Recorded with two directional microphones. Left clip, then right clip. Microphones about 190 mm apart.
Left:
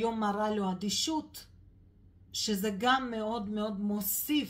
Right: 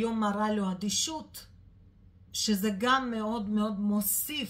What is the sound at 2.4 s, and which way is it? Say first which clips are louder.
Speech: right 1 dB; 25° left (ahead or behind).